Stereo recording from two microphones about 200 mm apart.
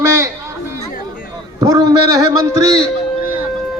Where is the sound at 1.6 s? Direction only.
20° right (ahead or behind).